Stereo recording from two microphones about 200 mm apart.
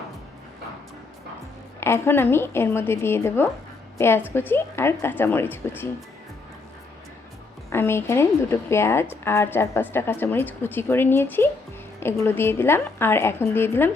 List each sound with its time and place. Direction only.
1.8 s a woman's voice: 10° left (ahead or behind)
7.7 s a woman's voice: 10° left (ahead or behind)